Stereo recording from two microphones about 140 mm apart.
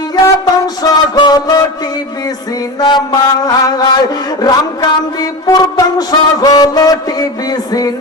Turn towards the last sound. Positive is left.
turn(degrees=25)  # may be behind; listen again after turning